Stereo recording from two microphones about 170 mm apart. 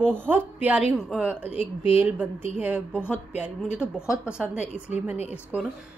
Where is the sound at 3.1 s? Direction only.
5° right (ahead or behind).